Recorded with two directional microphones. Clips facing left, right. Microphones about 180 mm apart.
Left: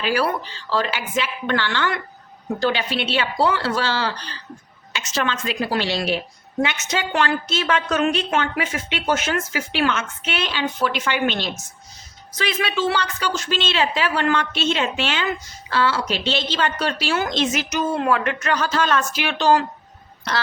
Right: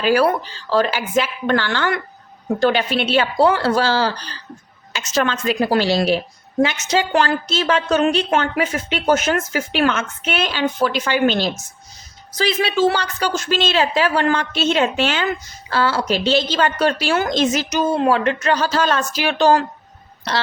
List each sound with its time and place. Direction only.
0.0 s a woman's voice: 45° right (ahead or behind)